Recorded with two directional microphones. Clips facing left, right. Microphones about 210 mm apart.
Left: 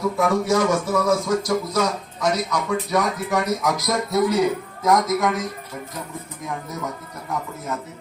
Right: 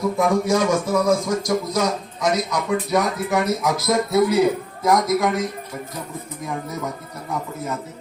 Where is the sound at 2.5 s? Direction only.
10° right (ahead or behind).